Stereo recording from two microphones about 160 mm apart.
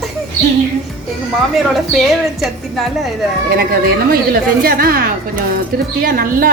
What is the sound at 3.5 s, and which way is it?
Speech, 70° right (ahead or behind).